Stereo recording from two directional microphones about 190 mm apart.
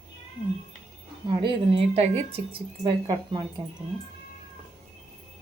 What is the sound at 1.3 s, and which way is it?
Speech, 25° right (ahead or behind).